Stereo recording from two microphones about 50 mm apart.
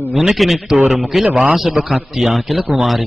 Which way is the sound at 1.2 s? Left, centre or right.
Right.